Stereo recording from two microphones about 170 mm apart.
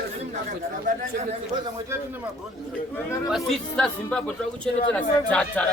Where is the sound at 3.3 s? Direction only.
5° left (ahead or behind).